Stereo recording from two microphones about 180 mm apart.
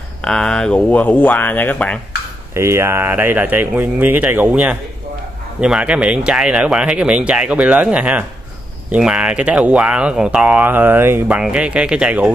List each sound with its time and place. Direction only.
0.2 s speech: 5° left (ahead or behind)
2.5 s speech: 15° right (ahead or behind)